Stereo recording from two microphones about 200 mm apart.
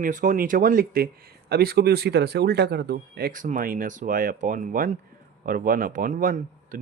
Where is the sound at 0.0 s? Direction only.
40° right (ahead or behind).